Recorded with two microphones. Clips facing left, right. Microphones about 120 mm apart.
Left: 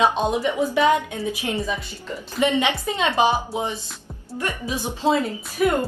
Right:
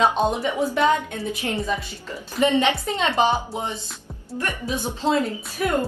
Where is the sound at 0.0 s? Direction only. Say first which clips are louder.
Even; centre (ahead or behind).